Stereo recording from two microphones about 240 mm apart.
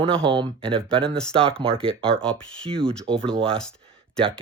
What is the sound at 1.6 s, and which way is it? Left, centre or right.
Speech, right.